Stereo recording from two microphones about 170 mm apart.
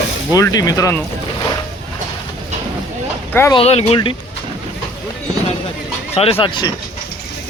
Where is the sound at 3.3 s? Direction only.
15° left (ahead or behind).